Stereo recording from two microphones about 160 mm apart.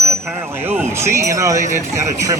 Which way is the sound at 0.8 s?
15° right (ahead or behind).